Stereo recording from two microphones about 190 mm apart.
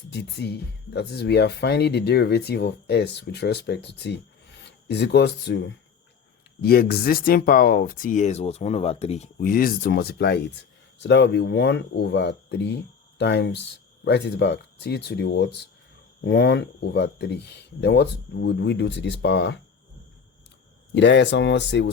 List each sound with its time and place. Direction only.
0.1 s speech: 65° left (ahead or behind)
20.9 s speech: 70° left (ahead or behind)